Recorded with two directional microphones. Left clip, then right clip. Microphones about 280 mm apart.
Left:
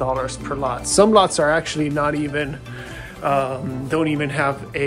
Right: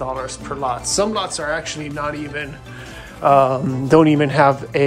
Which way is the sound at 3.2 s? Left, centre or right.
Centre.